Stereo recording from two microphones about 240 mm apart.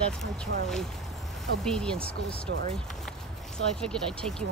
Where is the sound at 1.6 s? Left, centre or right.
Centre.